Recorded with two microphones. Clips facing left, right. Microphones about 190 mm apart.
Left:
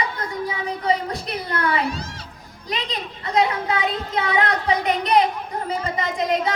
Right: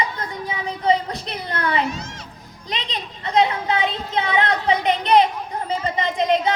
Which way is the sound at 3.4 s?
25° right (ahead or behind).